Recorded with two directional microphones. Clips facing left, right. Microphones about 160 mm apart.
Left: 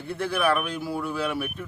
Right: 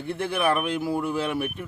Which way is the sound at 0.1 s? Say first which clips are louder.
Even; 20° right (ahead or behind).